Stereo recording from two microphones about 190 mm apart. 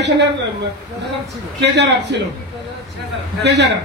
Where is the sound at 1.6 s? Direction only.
65° right (ahead or behind).